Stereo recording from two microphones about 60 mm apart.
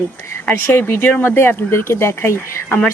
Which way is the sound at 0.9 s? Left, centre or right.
Left.